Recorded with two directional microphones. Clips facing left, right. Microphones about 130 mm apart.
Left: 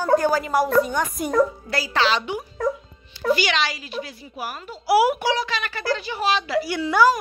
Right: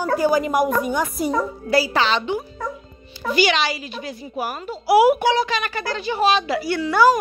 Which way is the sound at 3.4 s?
5° right (ahead or behind).